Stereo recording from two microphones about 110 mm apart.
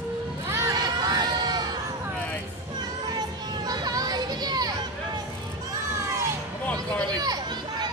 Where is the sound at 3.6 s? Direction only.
35° right (ahead or behind).